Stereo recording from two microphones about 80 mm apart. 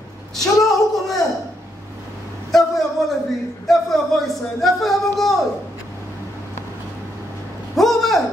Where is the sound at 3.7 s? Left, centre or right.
Centre.